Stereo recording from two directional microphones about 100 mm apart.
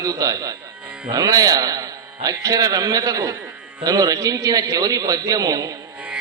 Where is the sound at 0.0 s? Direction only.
35° right (ahead or behind).